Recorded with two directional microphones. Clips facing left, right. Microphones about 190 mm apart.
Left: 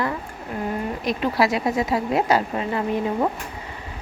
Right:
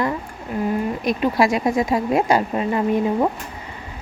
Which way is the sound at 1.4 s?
45° right (ahead or behind).